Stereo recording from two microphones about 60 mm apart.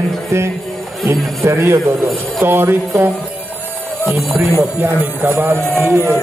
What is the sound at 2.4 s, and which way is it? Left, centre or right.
Music, right.